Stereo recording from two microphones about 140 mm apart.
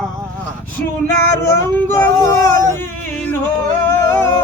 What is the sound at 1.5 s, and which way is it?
Speech, 20° left (ahead or behind).